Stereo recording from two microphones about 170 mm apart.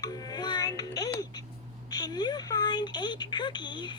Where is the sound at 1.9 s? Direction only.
25° left (ahead or behind).